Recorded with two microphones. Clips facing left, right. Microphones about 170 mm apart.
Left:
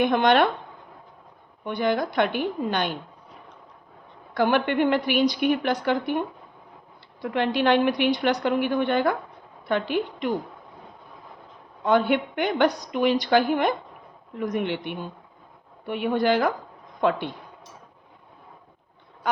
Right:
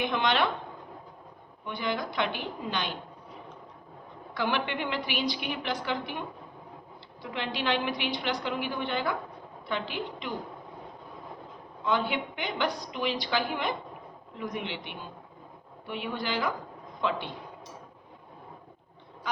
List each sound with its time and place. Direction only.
0.0 s a woman's voice: 50° left (ahead or behind)
1.6 s a woman's voice: 50° left (ahead or behind)
4.4 s a woman's voice: 50° left (ahead or behind)
11.9 s a woman's voice: 50° left (ahead or behind)
19.2 s a sound: 50° left (ahead or behind)